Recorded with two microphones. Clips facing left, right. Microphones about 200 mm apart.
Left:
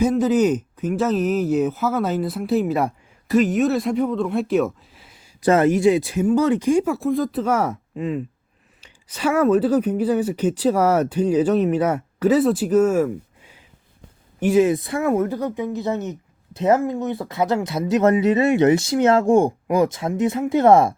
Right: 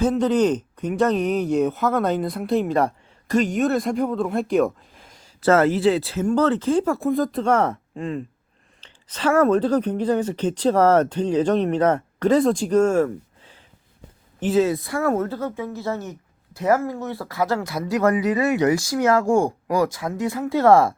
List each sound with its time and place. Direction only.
0.2 s speech: 5° left (ahead or behind)